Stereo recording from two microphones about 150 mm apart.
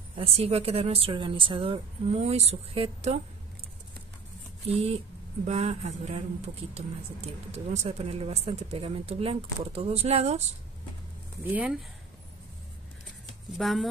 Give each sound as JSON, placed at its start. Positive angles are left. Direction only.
{"t": 0.2, "sound": "a woman's voice", "side_deg": -40}
{"t": 4.6, "sound": "a woman's voice", "side_deg": -40}
{"t": 11.4, "sound": "speech", "side_deg": -10}
{"t": 13.6, "sound": "speech", "side_deg": 0}